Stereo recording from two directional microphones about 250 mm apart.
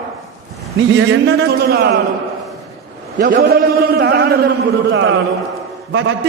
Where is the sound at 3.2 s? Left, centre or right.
Right.